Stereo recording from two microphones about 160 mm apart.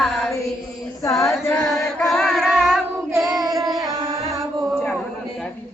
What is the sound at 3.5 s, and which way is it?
Music, centre (ahead or behind).